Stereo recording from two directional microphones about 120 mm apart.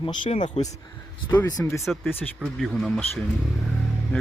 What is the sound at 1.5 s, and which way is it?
Speech, 30° left (ahead or behind).